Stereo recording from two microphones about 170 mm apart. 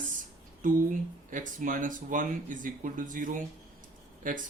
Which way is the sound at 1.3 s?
50° right (ahead or behind).